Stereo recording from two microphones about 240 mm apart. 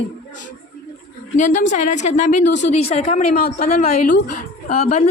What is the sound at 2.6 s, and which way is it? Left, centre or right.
Speech, left.